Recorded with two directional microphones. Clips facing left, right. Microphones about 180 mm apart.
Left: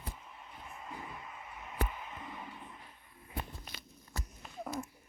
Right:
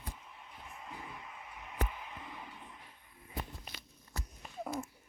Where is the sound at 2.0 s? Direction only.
45° left (ahead or behind).